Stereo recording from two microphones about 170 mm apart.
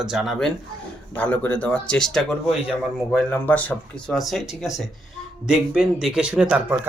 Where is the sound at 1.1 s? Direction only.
10° left (ahead or behind).